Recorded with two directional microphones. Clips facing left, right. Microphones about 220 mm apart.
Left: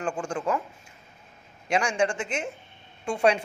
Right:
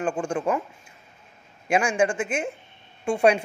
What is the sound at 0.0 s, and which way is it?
Speech, 25° right (ahead or behind).